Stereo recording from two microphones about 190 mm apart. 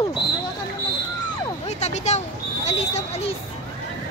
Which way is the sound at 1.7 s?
35° left (ahead or behind).